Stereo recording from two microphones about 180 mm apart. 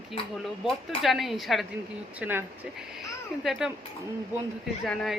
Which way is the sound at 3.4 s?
Centre (ahead or behind).